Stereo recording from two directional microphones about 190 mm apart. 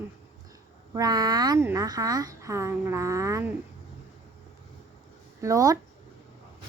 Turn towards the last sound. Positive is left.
turn(degrees=-15)  # may be behind; listen again after turning